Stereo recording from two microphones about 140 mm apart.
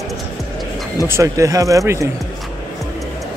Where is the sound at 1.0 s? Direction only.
20° right (ahead or behind).